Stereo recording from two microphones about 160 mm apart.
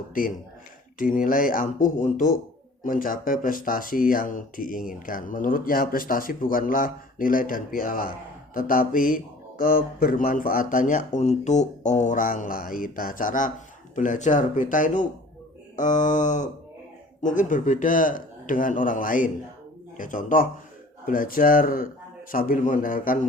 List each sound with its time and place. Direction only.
0.9 s speech: 55° left (ahead or behind)